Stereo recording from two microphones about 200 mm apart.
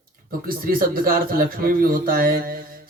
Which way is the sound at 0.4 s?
45° right (ahead or behind).